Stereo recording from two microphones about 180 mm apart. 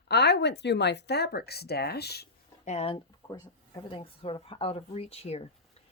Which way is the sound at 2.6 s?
35° left (ahead or behind).